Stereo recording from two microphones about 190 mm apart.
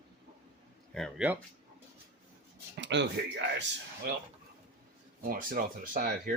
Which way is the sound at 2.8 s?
65° right (ahead or behind).